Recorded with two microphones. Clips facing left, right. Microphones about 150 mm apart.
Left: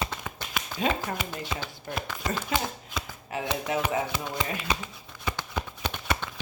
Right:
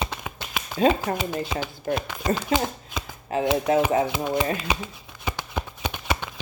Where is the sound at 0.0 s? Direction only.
20° right (ahead or behind).